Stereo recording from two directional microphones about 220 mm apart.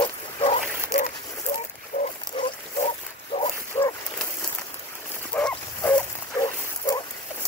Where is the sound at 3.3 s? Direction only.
25° left (ahead or behind).